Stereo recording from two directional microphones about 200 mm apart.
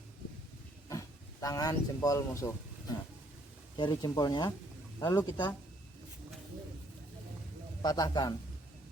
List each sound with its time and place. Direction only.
0.9 s speech: 15° left (ahead or behind)
3.8 s speech: 20° left (ahead or behind)
7.8 s speech: 20° left (ahead or behind)